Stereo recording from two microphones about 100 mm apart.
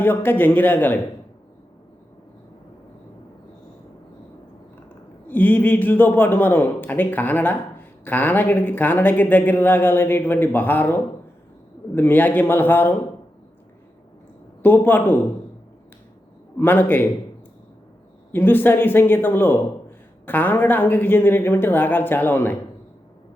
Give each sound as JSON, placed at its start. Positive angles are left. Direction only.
{"t": 0.0, "sound": "speech", "side_deg": 20}
{"t": 5.3, "sound": "speech", "side_deg": 20}
{"t": 14.6, "sound": "speech", "side_deg": 20}
{"t": 16.6, "sound": "speech", "side_deg": 20}
{"t": 18.3, "sound": "speech", "side_deg": 20}